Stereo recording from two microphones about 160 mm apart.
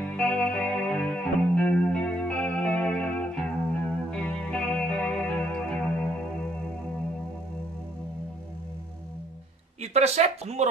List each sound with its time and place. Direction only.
0.0 s music: 5° left (ahead or behind)
9.8 s speech: 40° right (ahead or behind)